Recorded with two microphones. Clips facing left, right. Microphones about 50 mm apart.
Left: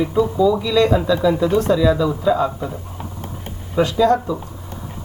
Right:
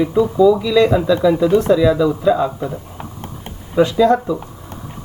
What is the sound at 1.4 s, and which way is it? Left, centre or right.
Speech, right.